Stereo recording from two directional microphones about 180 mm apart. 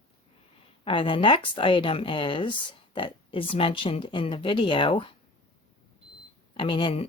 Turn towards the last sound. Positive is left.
turn(degrees=25)  # may be behind; listen again after turning